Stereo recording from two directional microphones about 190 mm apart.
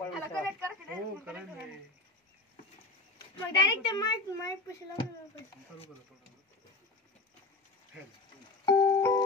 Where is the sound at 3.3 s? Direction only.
20° left (ahead or behind).